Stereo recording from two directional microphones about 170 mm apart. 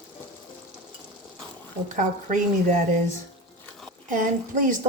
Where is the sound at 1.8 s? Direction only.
50° right (ahead or behind).